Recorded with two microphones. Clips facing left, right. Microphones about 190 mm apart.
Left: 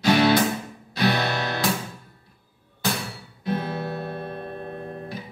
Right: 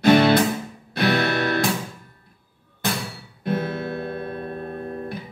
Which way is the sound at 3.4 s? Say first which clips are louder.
Right 2 dB; 55° right (ahead or behind).